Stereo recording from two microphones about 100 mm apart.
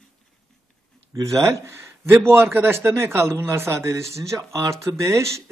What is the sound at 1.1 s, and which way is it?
Speech, 35° right (ahead or behind).